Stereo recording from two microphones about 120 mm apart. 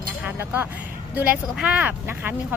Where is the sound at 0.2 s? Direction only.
15° right (ahead or behind).